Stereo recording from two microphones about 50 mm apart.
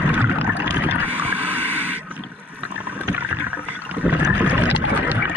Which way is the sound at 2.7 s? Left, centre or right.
Right.